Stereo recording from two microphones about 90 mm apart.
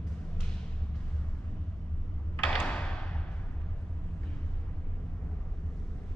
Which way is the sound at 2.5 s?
15° left (ahead or behind).